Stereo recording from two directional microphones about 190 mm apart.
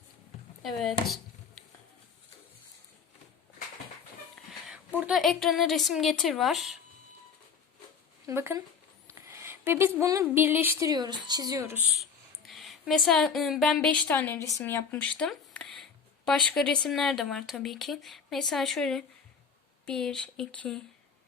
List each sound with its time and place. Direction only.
0.6 s a woman's voice: centre (ahead or behind)
4.9 s a woman's voice: 5° right (ahead or behind)
8.3 s a woman's voice: 15° right (ahead or behind)
9.0 s a sound: 15° right (ahead or behind)
10.0 s a woman's voice: 15° right (ahead or behind)
12.5 s a woman's voice: centre (ahead or behind)
15.2 s a sound: 5° left (ahead or behind)
16.6 s a woman's voice: 5° left (ahead or behind)